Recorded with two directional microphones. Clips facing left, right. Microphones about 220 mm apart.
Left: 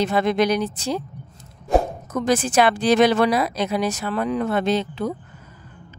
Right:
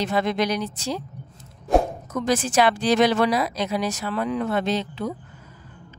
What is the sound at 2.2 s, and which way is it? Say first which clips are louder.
Speech: left 2 dB; 55° left (ahead or behind).